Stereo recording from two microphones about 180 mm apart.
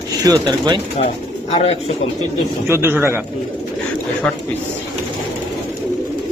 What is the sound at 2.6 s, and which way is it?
Speech, 15° right (ahead or behind).